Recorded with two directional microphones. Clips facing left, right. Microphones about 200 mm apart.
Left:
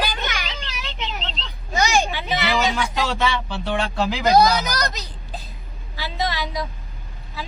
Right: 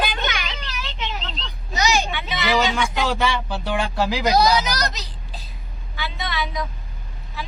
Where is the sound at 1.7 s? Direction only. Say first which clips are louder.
Left 2 dB; 50° left (ahead or behind).